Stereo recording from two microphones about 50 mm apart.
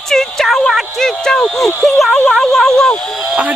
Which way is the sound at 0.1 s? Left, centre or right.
Centre.